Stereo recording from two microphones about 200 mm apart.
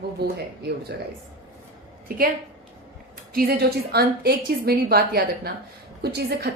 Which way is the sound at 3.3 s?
45° right (ahead or behind).